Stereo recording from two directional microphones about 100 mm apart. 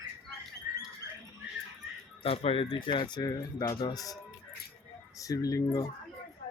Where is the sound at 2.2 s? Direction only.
75° left (ahead or behind); by 5.8 s 35° left (ahead or behind).